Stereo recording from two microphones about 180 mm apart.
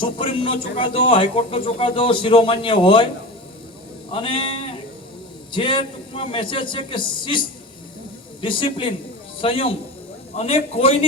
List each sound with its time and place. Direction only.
0.0 s speech: 30° left (ahead or behind)
4.1 s a man's voice: 30° left (ahead or behind)